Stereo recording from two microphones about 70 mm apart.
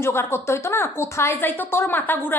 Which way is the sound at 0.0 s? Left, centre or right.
Left.